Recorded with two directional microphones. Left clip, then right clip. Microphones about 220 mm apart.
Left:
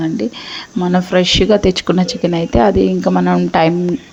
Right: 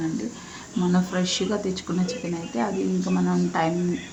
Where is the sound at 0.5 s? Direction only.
30° left (ahead or behind).